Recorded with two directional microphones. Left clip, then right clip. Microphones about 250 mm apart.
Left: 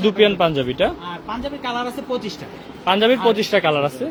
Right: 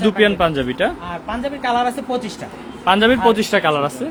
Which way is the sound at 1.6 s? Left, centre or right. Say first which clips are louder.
Right 7 dB; right.